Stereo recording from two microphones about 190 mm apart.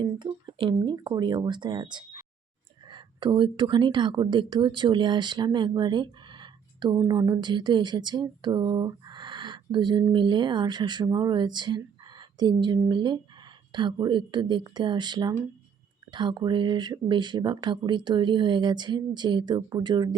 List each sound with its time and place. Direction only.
0.0 s a woman's voice: 25° right (ahead or behind)